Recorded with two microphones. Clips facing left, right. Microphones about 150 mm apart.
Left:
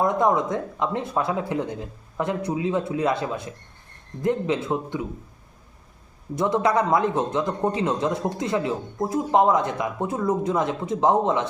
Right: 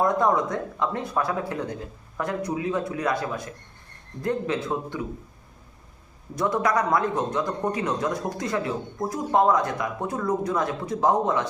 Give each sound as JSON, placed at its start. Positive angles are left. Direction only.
{"t": 0.0, "sound": "a man's voice", "side_deg": 20}
{"t": 6.3, "sound": "a man's voice", "side_deg": 25}